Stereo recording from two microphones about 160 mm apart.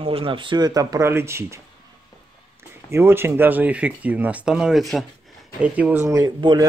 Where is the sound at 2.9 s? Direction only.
15° right (ahead or behind).